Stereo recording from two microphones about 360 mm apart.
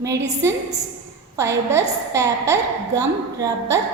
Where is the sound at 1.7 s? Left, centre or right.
Centre.